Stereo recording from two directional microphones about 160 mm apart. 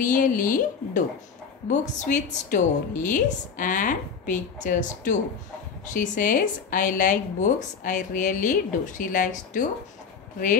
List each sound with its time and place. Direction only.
0.0 s a woman's voice: 55° left (ahead or behind)